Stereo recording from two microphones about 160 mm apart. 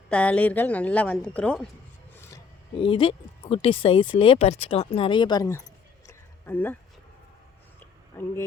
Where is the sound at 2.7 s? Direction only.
35° left (ahead or behind).